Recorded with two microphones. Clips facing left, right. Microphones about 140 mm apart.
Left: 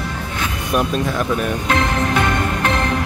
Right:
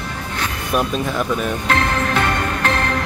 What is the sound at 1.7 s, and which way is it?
Music, 20° left (ahead or behind).